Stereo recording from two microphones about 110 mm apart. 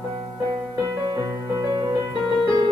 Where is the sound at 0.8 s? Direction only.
35° right (ahead or behind).